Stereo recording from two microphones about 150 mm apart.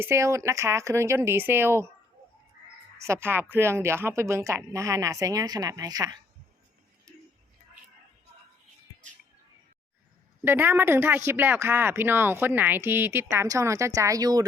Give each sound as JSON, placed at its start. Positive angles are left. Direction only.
{"t": 0.0, "sound": "speech", "side_deg": -20}
{"t": 3.0, "sound": "speech", "side_deg": -15}
{"t": 10.4, "sound": "speech", "side_deg": -15}